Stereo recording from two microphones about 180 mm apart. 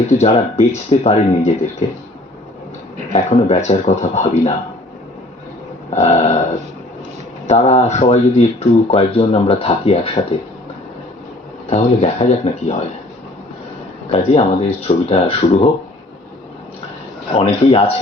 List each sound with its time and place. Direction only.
0.1 s speech: 40° left (ahead or behind)
3.1 s speech: 35° left (ahead or behind)
5.9 s speech: 40° left (ahead or behind)
7.4 s speech: 40° left (ahead or behind)
11.7 s speech: 35° left (ahead or behind)
14.1 s speech: 35° left (ahead or behind)
17.3 s speech: 35° left (ahead or behind)